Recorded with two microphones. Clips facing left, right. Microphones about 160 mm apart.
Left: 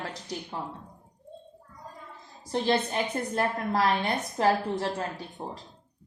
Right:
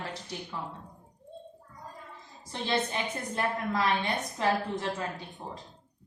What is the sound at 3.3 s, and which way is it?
A woman's voice, 40° left (ahead or behind).